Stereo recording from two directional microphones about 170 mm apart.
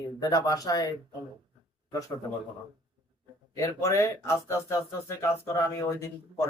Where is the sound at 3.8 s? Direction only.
15° left (ahead or behind).